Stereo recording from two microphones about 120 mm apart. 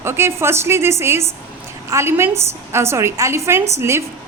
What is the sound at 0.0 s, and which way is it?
A woman's voice, 20° right (ahead or behind).